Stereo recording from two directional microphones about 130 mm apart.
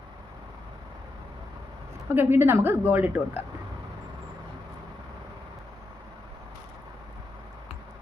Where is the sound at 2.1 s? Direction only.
20° right (ahead or behind).